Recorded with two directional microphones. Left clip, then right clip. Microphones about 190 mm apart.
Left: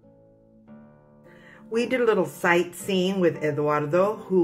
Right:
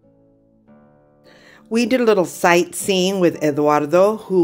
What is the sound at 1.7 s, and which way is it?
A woman's voice, 50° right (ahead or behind).